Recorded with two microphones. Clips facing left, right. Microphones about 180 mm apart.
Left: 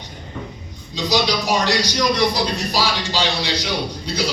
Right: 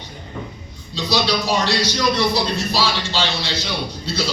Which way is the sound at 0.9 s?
15° left (ahead or behind).